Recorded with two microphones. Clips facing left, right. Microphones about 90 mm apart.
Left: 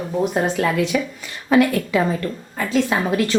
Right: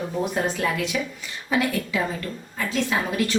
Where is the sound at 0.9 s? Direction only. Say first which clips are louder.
Left 5 dB; 60° left (ahead or behind).